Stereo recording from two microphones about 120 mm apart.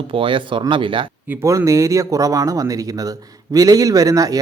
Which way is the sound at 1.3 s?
25° right (ahead or behind).